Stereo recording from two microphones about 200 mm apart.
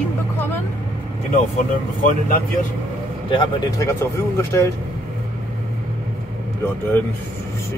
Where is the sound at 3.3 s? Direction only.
15° left (ahead or behind).